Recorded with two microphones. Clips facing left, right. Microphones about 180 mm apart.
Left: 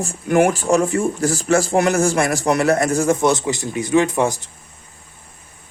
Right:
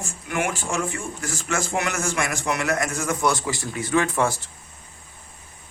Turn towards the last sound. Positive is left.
turn(degrees=20)  # may be behind; listen again after turning